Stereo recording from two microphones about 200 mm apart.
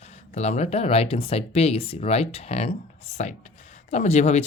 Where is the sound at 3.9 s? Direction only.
35° left (ahead or behind).